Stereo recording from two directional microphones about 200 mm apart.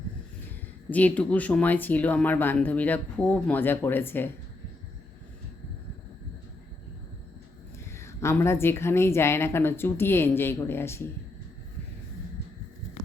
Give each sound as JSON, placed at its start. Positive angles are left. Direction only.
{"t": 0.9, "sound": "speech", "side_deg": 10}
{"t": 7.9, "sound": "speech", "side_deg": 15}